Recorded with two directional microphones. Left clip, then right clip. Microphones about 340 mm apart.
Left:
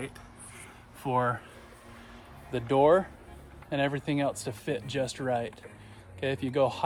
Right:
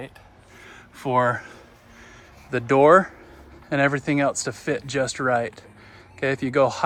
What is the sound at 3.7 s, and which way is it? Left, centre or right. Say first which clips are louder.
Speech: right 8 dB; right.